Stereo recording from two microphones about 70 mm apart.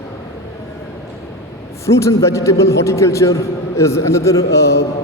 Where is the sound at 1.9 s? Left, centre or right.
Left.